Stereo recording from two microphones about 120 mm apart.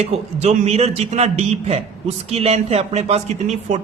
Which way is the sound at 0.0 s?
60° right (ahead or behind).